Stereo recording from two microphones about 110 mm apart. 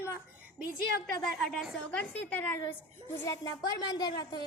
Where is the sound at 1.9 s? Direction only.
10° left (ahead or behind).